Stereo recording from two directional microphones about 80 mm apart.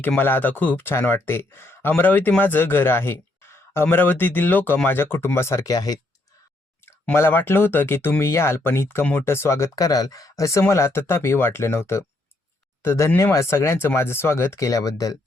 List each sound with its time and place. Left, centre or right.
0.2 s speech: left
5.7 s speech: left
7.1 s speech: left